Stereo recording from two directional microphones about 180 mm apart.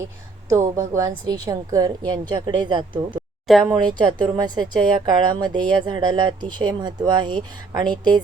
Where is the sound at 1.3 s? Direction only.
20° right (ahead or behind).